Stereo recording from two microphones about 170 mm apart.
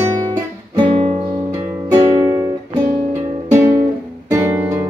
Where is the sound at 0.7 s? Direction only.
30° right (ahead or behind).